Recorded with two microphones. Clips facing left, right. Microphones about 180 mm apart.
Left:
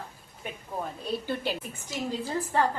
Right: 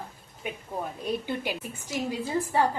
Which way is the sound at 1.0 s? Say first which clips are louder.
Right 1 dB; 15° right (ahead or behind).